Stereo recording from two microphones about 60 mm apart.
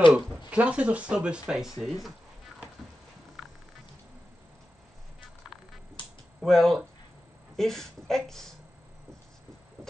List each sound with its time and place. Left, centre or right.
0.1 s speech: centre
6.4 s a woman's voice: centre